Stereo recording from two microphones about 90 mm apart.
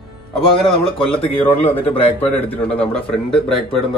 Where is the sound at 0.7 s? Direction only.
90° left.